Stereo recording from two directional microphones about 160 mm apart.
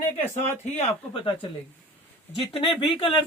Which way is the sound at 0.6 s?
40° left (ahead or behind).